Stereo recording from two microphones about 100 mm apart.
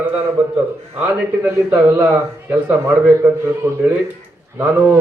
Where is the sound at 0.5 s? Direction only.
15° right (ahead or behind).